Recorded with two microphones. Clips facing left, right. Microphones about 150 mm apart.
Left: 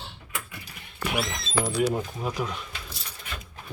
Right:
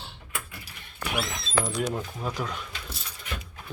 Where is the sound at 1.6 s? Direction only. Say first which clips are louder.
Left 4 dB; 35° left (ahead or behind).